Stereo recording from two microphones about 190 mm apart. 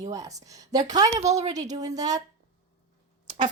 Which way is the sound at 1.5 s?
20° right (ahead or behind).